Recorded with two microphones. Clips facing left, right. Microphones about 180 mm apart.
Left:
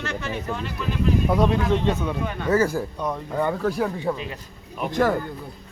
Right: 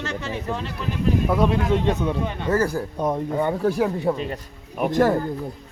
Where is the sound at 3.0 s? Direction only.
20° right (ahead or behind).